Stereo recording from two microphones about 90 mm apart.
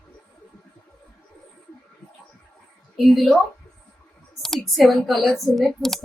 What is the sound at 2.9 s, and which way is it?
Speech, centre (ahead or behind).